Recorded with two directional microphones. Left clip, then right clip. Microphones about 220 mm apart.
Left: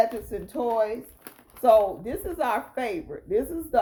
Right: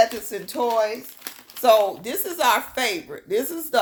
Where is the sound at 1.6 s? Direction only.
15° right (ahead or behind).